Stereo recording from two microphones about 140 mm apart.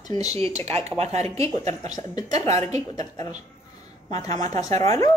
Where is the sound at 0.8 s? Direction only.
50° right (ahead or behind).